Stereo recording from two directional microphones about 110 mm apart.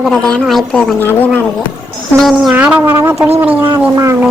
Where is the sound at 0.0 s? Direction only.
Centre (ahead or behind).